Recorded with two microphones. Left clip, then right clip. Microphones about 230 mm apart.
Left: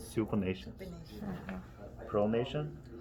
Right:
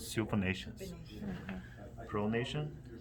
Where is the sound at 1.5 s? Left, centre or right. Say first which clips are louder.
Left 2 dB; left.